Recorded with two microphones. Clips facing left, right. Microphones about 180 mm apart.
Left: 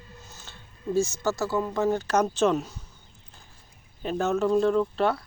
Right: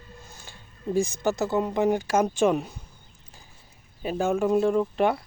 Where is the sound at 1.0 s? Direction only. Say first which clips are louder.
Right 1 dB; 15° right (ahead or behind).